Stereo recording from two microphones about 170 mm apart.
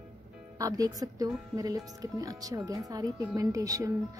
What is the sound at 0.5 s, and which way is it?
Speech, 20° right (ahead or behind).